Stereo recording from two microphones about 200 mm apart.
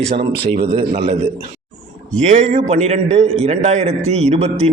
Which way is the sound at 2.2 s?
35° right (ahead or behind).